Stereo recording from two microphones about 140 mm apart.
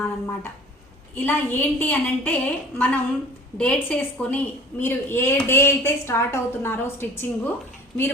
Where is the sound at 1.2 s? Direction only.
15° left (ahead or behind).